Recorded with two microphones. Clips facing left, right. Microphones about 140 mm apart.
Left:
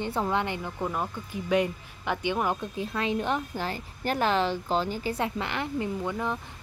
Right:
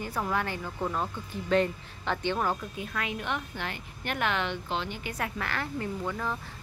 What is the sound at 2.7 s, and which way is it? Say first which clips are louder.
Speech: left 6 dB; 30° left (ahead or behind).